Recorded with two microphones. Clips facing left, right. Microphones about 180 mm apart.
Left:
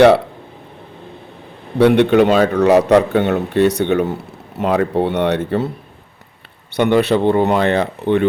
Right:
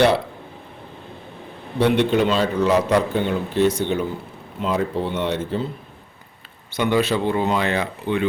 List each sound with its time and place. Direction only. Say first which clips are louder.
1.8 s a man's voice: left 7 dB; 60° left (ahead or behind)
6.7 s speech: left 6 dB; 65° left (ahead or behind)